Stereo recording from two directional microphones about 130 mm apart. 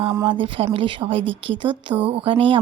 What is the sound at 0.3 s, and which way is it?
Speech, 40° right (ahead or behind).